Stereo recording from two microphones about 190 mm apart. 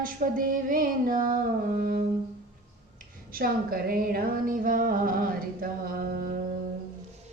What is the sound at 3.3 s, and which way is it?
Speech, 50° right (ahead or behind).